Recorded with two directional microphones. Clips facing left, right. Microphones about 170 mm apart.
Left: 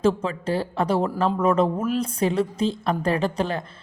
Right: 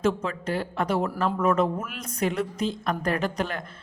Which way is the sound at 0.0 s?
30° left (ahead or behind).